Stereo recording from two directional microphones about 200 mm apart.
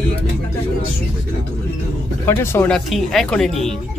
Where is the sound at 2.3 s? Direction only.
10° left (ahead or behind).